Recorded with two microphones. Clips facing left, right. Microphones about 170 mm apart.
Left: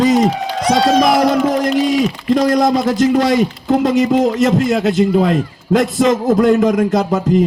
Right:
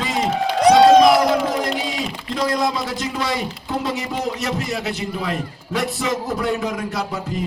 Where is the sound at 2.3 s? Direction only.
45° left (ahead or behind).